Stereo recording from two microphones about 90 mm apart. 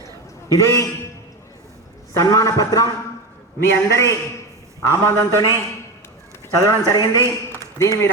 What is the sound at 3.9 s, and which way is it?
Speech, 35° left (ahead or behind).